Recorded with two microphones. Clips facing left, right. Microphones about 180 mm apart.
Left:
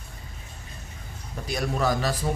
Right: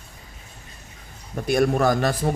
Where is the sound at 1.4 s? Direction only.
55° right (ahead or behind).